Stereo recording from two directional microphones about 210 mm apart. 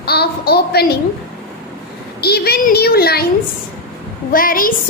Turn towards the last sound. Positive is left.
turn(degrees=40)  # may be behind; listen again after turning